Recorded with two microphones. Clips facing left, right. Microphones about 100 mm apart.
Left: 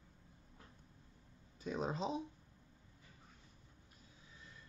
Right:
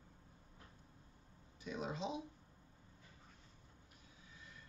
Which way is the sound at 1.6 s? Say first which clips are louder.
Left 3 dB; 35° left (ahead or behind).